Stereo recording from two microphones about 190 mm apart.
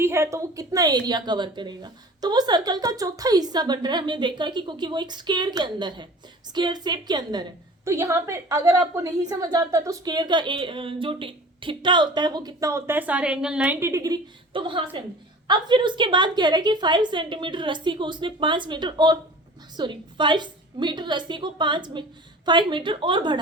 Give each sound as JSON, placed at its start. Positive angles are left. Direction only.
{"t": 0.0, "sound": "a woman's voice", "side_deg": -15}